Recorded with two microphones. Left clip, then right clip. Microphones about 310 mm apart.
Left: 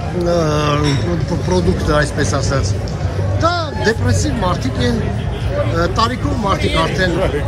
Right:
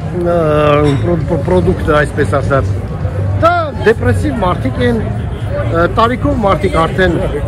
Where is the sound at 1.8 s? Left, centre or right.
Centre.